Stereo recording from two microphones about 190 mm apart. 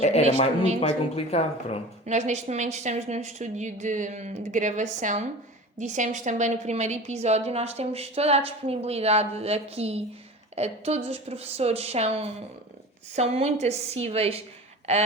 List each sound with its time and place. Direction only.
0.0 s speech: 35° left (ahead or behind)
2.0 s a woman's voice: 40° right (ahead or behind)